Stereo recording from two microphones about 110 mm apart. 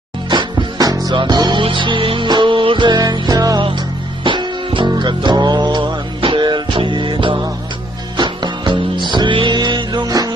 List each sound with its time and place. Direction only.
0.3 s music: 45° right (ahead or behind)
3.6 s music: 50° right (ahead or behind)